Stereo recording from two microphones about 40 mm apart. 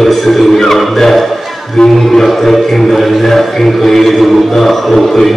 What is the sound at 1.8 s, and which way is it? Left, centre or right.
A man's voice, centre.